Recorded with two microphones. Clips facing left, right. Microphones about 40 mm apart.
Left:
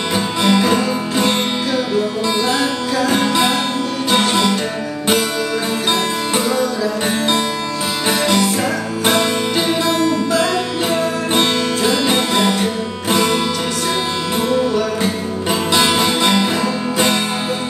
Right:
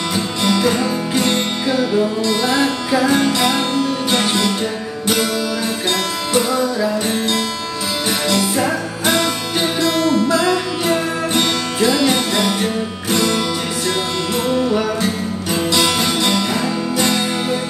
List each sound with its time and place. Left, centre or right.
0.1 s music: left
1.8 s music: centre
10.4 s music: centre
15.8 s music: left